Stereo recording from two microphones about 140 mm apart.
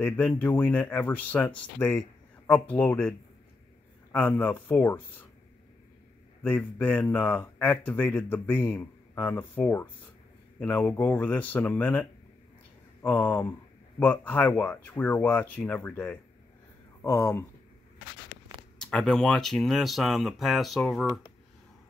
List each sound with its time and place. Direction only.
0.4 s speech: 15° left (ahead or behind)
6.4 s speech: 15° left (ahead or behind)
18.8 s speech: 5° left (ahead or behind)